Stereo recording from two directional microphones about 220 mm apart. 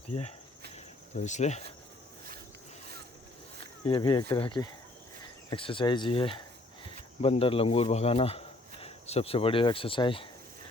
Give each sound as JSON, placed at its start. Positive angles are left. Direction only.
{"t": 0.1, "sound": "speech", "side_deg": 30}
{"t": 3.8, "sound": "speech", "side_deg": 20}